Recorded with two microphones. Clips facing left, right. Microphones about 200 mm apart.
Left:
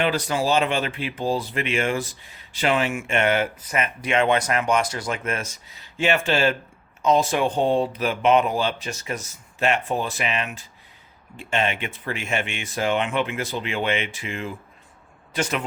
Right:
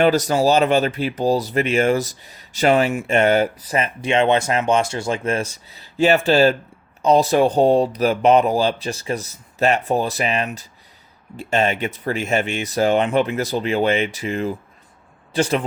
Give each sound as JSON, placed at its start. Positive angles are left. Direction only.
{"t": 0.0, "sound": "speech", "side_deg": -40}